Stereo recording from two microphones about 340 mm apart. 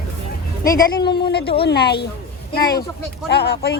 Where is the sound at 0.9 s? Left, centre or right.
Left.